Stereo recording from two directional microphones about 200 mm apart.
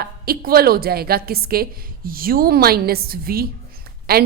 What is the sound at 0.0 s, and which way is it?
A woman's voice, 50° right (ahead or behind).